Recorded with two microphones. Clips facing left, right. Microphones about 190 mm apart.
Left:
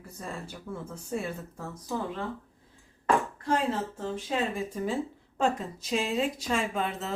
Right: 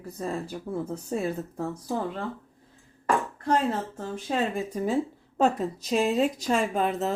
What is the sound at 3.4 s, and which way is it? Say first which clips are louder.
A woman's voice: right 3 dB; 40° right (ahead or behind).